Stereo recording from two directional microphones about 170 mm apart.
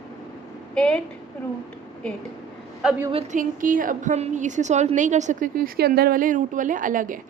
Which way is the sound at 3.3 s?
50° right (ahead or behind).